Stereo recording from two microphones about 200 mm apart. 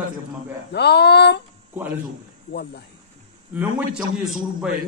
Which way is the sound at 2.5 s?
50° left (ahead or behind).